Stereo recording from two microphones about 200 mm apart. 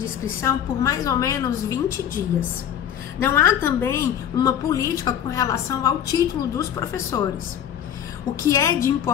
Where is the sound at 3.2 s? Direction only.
10° left (ahead or behind).